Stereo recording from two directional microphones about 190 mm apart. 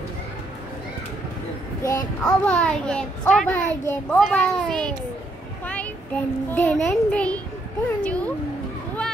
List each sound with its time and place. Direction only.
1.8 s child singing: 15° left (ahead or behind)
2.2 s a child's voice: 5° left (ahead or behind)